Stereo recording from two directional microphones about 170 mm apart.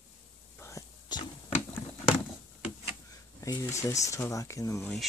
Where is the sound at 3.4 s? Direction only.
20° left (ahead or behind).